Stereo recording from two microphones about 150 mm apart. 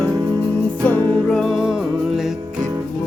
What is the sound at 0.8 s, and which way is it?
Music, 10° left (ahead or behind).